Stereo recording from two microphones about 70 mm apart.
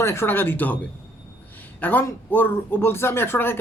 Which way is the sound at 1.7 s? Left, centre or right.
Left.